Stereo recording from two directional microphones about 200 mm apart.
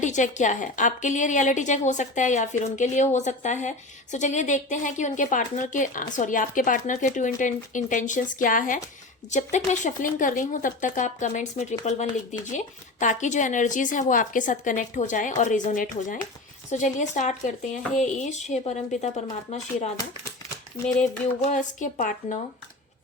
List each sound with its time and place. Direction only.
0.0 s a woman's voice: 35° left (ahead or behind)
21.0 s a woman's voice: 35° left (ahead or behind)